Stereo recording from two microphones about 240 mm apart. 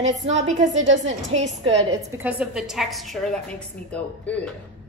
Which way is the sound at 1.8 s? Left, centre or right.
Centre.